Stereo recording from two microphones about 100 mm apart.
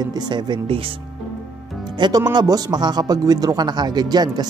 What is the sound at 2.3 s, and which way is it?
Speech, 45° right (ahead or behind).